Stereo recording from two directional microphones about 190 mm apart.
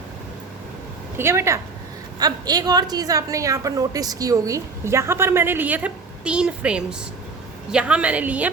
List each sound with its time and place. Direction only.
1.1 s a woman's voice: 15° right (ahead or behind)